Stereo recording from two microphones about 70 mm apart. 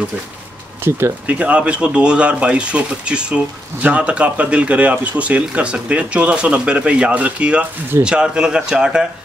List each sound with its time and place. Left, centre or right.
0.8 s speech: right
1.2 s speech: centre